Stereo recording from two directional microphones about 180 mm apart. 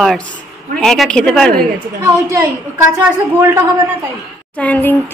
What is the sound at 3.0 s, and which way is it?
Speech, 10° right (ahead or behind).